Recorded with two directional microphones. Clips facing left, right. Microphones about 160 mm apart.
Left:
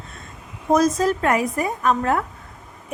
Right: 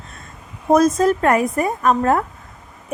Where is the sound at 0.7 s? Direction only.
55° right (ahead or behind).